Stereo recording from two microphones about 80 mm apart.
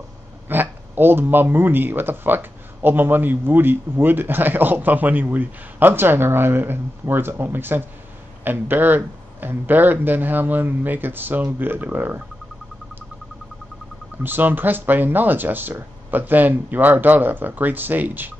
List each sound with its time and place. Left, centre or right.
0.5 s speech: right
14.2 s speech: right